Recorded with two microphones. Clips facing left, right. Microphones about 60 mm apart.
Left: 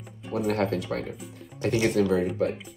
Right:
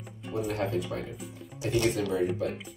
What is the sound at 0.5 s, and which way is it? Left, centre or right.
Speech, left.